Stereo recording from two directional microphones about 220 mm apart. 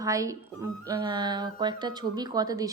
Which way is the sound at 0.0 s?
15° right (ahead or behind).